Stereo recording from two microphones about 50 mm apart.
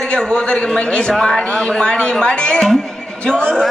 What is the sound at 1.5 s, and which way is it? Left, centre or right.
Speech, centre.